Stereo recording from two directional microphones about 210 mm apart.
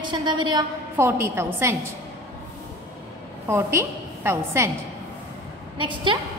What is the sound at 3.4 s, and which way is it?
A woman's voice, 10° right (ahead or behind).